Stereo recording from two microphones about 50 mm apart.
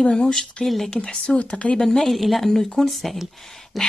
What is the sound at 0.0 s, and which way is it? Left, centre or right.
A woman's voice, centre.